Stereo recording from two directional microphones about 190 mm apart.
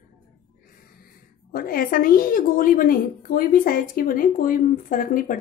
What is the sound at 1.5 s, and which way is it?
A woman's voice, 50° left (ahead or behind).